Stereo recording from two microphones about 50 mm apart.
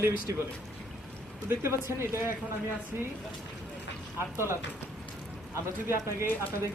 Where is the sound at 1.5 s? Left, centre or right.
Right.